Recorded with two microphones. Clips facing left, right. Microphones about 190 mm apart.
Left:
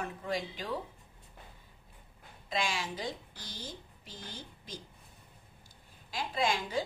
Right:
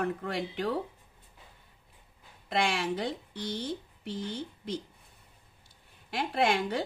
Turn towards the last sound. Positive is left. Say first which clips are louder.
# right 4 dB
turn(degrees=-65)  # may be behind; listen again after turning